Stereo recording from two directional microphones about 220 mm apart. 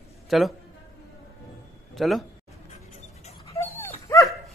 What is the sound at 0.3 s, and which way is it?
Speech, centre (ahead or behind).